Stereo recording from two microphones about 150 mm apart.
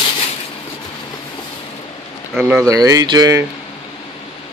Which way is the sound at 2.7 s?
25° right (ahead or behind).